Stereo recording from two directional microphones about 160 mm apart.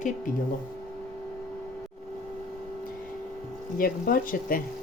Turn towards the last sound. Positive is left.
turn(degrees=60)  # may be behind; listen again after turning